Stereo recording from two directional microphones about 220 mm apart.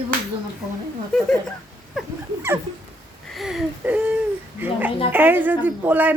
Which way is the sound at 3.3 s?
Centre (ahead or behind).